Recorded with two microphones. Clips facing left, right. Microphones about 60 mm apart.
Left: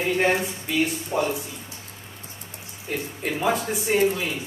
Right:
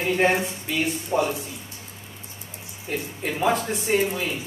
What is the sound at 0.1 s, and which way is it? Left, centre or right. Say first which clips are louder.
A man's voice: right 2 dB; centre.